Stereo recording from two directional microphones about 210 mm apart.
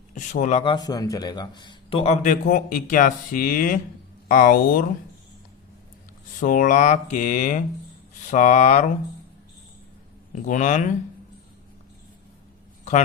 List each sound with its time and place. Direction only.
0.1 s speech: 35° left (ahead or behind)
6.4 s speech: 40° left (ahead or behind)
10.3 s speech: 35° left (ahead or behind)